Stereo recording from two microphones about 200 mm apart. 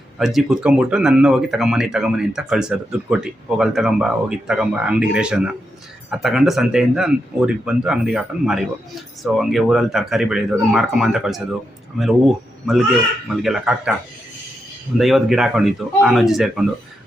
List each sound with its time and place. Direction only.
0.2 s speech: centre (ahead or behind)
14.9 s speech: centre (ahead or behind)